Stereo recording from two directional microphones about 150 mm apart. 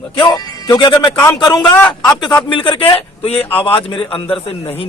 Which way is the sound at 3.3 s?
10° left (ahead or behind).